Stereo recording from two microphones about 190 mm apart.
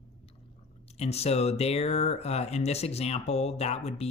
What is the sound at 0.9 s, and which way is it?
Speech, 35° left (ahead or behind).